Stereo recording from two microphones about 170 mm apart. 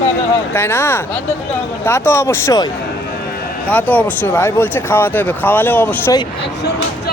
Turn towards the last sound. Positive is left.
turn(degrees=10)  # may be behind; listen again after turning